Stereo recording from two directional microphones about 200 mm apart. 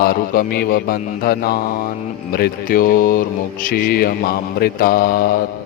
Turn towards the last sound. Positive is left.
turn(degrees=50)  # may be behind; listen again after turning